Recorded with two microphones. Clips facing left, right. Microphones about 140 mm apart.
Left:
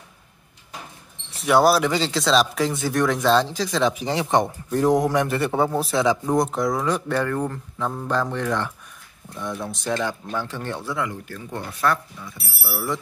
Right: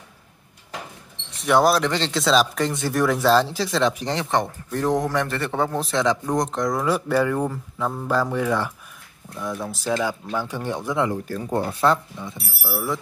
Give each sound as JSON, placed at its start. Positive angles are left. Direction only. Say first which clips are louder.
{"t": 1.4, "sound": "speech", "louder": "left 1 dB", "side_deg": 0}
{"t": 11.1, "sound": "speech", "louder": "right 7 dB", "side_deg": -35}
{"t": 12.7, "sound": "speech", "louder": "right 1 dB", "side_deg": 0}